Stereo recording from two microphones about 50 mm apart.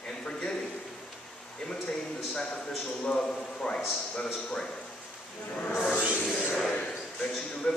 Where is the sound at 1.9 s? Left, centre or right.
Centre.